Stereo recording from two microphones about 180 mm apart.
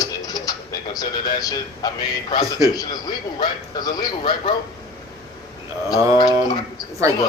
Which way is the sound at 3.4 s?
25° left (ahead or behind).